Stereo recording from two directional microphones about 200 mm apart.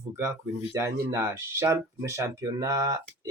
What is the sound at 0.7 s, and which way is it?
Speech, 15° right (ahead or behind).